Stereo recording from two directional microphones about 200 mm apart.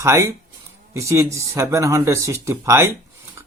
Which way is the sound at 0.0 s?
15° right (ahead or behind).